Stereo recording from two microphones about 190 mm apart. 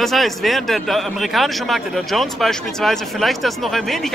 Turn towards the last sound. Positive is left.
turn(degrees=0)  # may be behind; listen again after turning